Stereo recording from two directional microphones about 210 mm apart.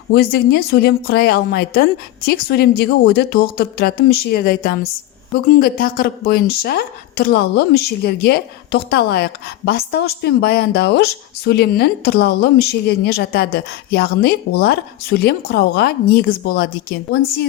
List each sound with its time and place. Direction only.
0.1 s a woman's voice: 50° left (ahead or behind)